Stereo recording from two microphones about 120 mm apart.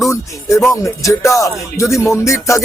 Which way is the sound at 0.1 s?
25° left (ahead or behind).